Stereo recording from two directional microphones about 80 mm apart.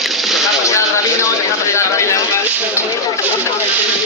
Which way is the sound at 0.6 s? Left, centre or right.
Left.